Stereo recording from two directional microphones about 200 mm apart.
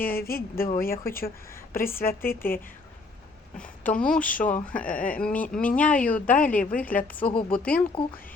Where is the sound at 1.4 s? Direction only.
15° left (ahead or behind).